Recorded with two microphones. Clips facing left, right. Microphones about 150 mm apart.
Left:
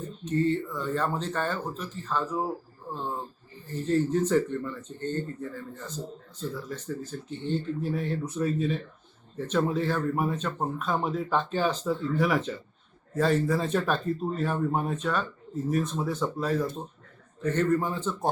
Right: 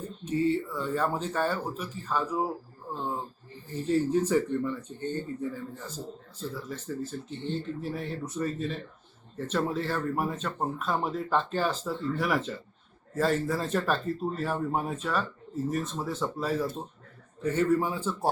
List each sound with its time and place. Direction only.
0.3 s speech: 10° right (ahead or behind)
3.7 s speech: 10° right (ahead or behind)